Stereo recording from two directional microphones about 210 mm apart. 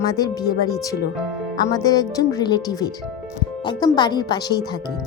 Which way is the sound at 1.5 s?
20° left (ahead or behind).